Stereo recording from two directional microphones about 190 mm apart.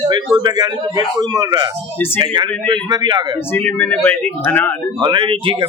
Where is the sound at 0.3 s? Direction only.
20° right (ahead or behind).